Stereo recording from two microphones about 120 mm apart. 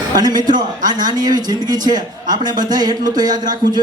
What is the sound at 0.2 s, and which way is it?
A man's voice, 35° right (ahead or behind).